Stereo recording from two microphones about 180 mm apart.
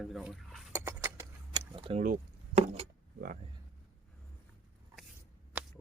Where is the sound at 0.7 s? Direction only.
15° right (ahead or behind).